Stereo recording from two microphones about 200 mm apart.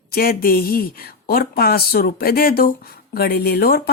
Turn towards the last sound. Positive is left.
turn(degrees=50)  # may be behind; listen again after turning